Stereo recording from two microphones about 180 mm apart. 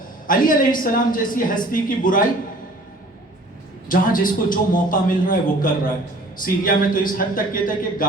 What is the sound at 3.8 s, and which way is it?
A man's voice, 50° left (ahead or behind).